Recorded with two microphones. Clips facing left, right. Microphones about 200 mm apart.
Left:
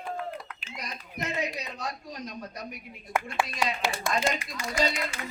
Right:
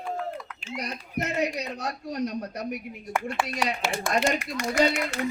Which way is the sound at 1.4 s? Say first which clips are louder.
Right 5 dB; 70° right (ahead or behind).